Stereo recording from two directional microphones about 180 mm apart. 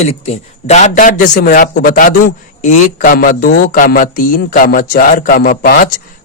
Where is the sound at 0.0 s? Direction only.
35° left (ahead or behind).